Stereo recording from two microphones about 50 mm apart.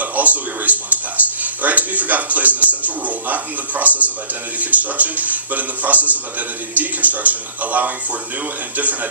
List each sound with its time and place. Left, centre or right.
0.0 s speech: right